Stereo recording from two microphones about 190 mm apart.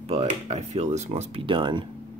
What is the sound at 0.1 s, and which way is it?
Speech, 35° right (ahead or behind).